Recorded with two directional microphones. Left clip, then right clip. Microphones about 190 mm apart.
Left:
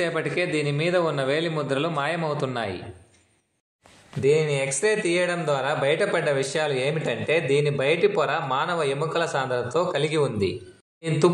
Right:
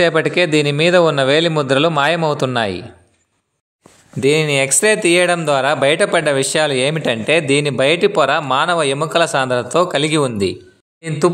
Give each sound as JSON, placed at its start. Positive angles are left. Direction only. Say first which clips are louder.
{"t": 0.0, "sound": "speech", "louder": "right 11 dB", "side_deg": -45}
{"t": 4.2, "sound": "speech", "louder": "right 7 dB", "side_deg": -55}
{"t": 11.0, "sound": "speech", "louder": "right 5 dB", "side_deg": -25}